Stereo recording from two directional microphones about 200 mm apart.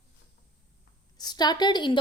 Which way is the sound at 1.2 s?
20° left (ahead or behind).